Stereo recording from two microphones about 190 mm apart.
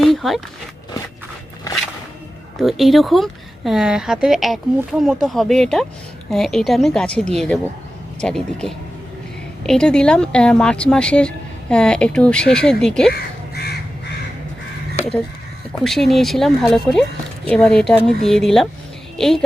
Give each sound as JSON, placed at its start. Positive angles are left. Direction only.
{"t": 0.0, "sound": "a sound", "side_deg": 0}
{"t": 2.6, "sound": "speech", "side_deg": 0}
{"t": 13.5, "sound": "crow", "side_deg": 55}
{"t": 15.8, "sound": "a woman's voice", "side_deg": 0}